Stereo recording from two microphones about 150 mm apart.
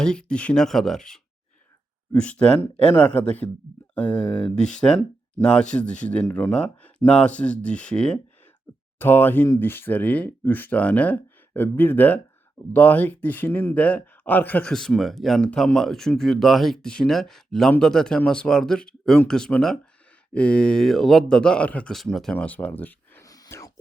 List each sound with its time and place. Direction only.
0.0 s speech: 5° left (ahead or behind)
23.2 s whispering: 25° left (ahead or behind)